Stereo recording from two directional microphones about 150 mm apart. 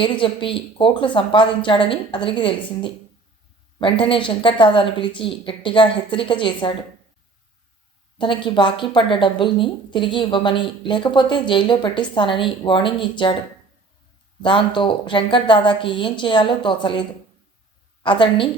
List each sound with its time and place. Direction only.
0.0 s speech: 35° left (ahead or behind)
8.2 s speech: 35° left (ahead or behind)
14.4 s speech: 35° left (ahead or behind)